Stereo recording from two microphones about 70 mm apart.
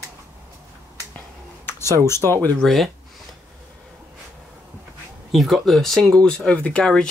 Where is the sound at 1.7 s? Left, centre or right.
Left.